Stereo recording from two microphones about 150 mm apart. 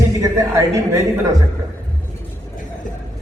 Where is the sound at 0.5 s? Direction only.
20° right (ahead or behind).